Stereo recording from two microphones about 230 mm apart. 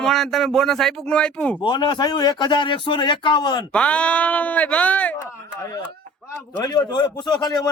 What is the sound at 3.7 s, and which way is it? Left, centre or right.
A man's voice, centre.